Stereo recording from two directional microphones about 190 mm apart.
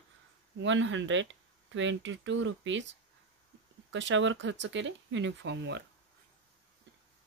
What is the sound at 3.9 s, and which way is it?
Speech, 75° right (ahead or behind).